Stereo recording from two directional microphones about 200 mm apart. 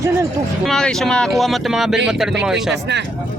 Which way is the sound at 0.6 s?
Centre (ahead or behind).